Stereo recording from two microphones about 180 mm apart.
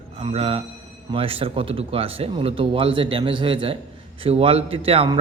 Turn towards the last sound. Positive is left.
turn(degrees=-30)  # may be behind; listen again after turning